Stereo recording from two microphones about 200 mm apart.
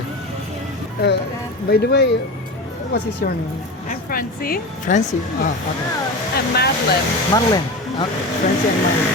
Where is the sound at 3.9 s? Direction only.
45° left (ahead or behind).